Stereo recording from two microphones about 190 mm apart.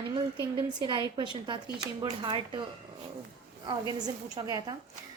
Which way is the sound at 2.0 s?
25° right (ahead or behind).